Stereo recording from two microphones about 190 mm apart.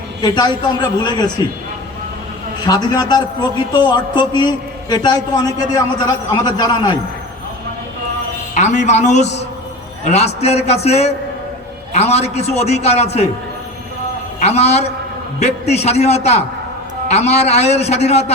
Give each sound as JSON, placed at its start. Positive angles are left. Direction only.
{"t": 0.2, "sound": "a man's voice", "side_deg": 20}
{"t": 2.6, "sound": "a man's voice", "side_deg": 20}
{"t": 8.5, "sound": "a man's voice", "side_deg": 40}
{"t": 14.3, "sound": "a man's voice", "side_deg": 35}